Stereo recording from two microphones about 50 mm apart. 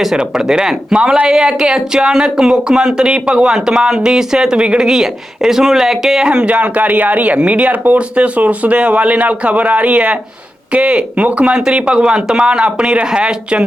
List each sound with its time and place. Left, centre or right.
0.2 s speech: centre
4.9 s speech: centre
6.5 s a man's voice: right
11.5 s a man's voice: centre